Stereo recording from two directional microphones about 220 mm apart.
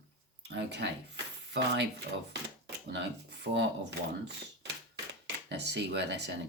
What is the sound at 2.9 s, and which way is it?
Speech, 50° right (ahead or behind).